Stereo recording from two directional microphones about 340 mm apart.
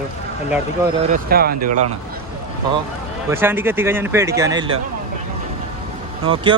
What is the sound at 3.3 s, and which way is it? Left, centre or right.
Speech, centre.